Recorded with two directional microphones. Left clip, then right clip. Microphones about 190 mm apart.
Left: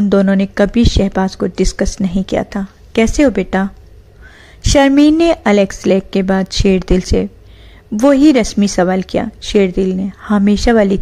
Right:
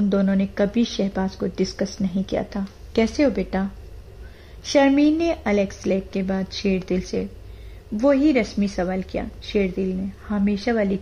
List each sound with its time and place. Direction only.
0.1 s speech: 30° left (ahead or behind)
4.7 s speech: 30° left (ahead or behind)